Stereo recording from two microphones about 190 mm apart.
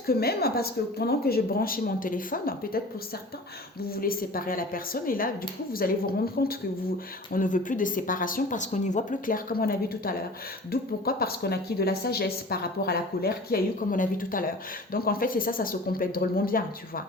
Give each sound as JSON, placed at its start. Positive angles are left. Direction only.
{"t": 0.1, "sound": "a woman's voice", "side_deg": 55}
{"t": 3.9, "sound": "a woman's voice", "side_deg": 50}
{"t": 6.4, "sound": "a woman's voice", "side_deg": 55}
{"t": 7.3, "sound": "a woman's voice", "side_deg": 45}